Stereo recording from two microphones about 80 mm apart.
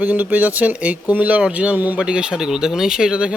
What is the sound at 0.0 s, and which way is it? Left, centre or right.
Speech, right.